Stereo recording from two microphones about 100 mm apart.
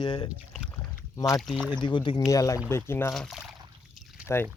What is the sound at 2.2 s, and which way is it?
Speech, 35° left (ahead or behind).